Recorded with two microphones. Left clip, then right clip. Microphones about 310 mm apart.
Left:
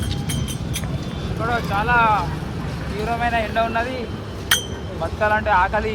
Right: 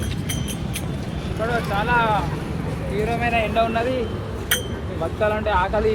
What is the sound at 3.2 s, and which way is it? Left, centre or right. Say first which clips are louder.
Speech: even; left.